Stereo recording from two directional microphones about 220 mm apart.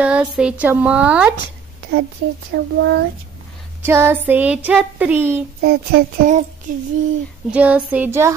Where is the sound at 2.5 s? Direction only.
50° right (ahead or behind).